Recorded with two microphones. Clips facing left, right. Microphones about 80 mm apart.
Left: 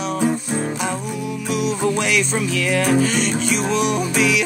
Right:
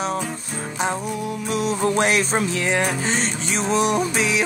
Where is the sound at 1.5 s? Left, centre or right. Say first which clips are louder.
Left 1 dB; right.